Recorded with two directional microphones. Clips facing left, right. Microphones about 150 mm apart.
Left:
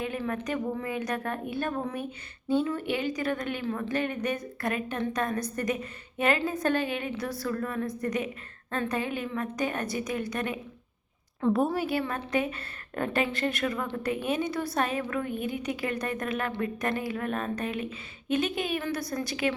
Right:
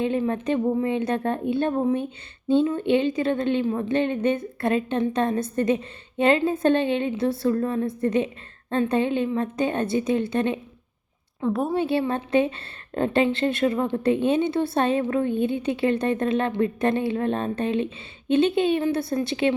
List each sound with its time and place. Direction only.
0.0 s a woman's voice: 25° right (ahead or behind)
11.3 s a woman's voice: centre (ahead or behind)
11.7 s a woman's voice: 25° right (ahead or behind)